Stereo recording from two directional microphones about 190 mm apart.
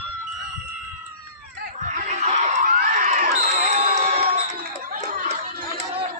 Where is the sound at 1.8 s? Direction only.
40° right (ahead or behind).